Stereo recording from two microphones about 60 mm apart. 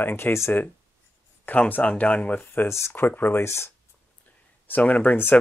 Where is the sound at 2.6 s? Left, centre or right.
Left.